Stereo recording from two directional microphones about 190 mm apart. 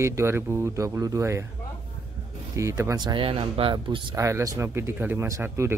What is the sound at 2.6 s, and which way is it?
Speech, 15° right (ahead or behind).